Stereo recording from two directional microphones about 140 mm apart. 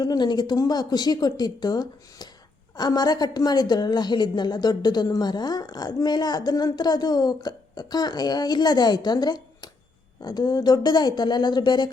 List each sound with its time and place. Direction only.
0.0 s a woman's voice: 30° left (ahead or behind)